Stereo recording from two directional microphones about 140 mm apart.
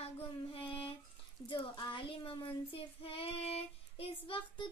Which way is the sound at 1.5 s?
35° left (ahead or behind).